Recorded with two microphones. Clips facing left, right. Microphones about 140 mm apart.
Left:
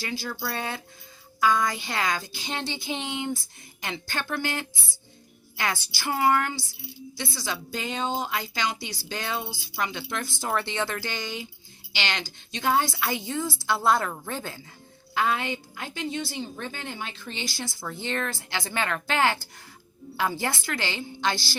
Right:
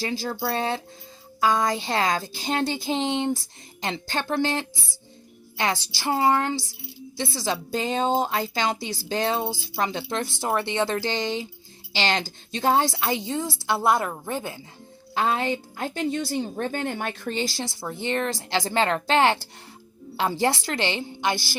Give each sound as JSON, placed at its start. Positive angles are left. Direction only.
{"t": 0.0, "sound": "speech", "side_deg": -35}
{"t": 12.9, "sound": "speech", "side_deg": -25}
{"t": 15.1, "sound": "a woman's voice", "side_deg": -30}
{"t": 17.3, "sound": "speech", "side_deg": -40}
{"t": 17.7, "sound": "speech", "side_deg": -20}
{"t": 18.3, "sound": "speech", "side_deg": -35}
{"t": 20.4, "sound": "speech", "side_deg": -30}